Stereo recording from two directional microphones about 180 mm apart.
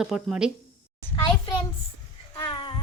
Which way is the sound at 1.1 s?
25° left (ahead or behind).